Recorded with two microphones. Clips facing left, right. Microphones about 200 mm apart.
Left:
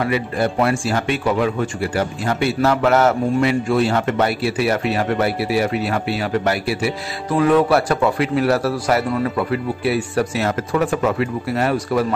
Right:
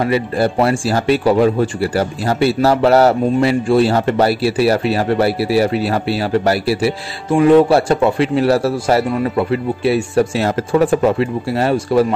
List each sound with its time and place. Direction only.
0.0 s speech: 30° right (ahead or behind)